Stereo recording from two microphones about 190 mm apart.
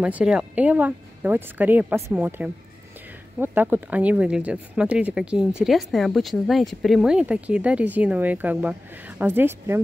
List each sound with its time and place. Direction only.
0.0 s speech: 5° right (ahead or behind)